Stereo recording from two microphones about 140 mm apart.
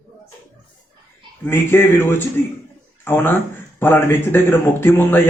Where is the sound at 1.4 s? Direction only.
15° left (ahead or behind).